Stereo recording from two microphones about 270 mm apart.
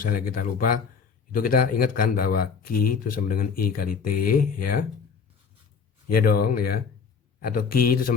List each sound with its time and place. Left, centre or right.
0.0 s speech: left
4.1 s speech: left
6.1 s speech: left